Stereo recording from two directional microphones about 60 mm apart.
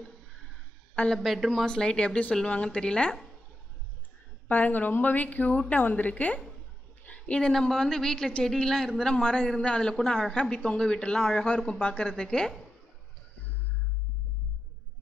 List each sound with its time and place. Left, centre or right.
1.1 s a man's voice: centre
1.7 s speech: centre
4.5 s a woman's voice: left
7.1 s a sound: centre
7.5 s a man's voice: centre